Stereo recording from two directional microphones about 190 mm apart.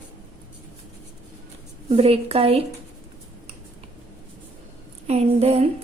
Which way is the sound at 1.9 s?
30° right (ahead or behind).